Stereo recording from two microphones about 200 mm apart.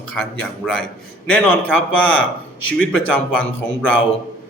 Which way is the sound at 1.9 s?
80° left.